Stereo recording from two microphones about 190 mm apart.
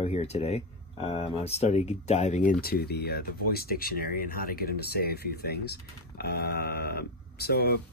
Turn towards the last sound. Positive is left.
turn(degrees=55)  # may be behind; listen again after turning